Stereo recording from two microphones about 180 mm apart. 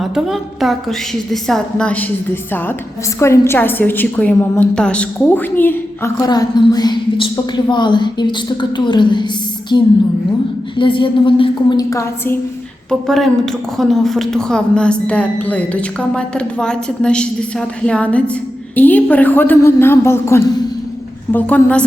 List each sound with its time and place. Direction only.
0.0 s a woman's voice: centre (ahead or behind); by 12.4 s 15° left (ahead or behind)
12.9 s a woman's voice: centre (ahead or behind)